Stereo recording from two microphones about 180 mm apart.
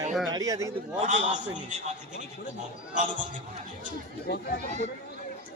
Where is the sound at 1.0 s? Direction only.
40° right (ahead or behind).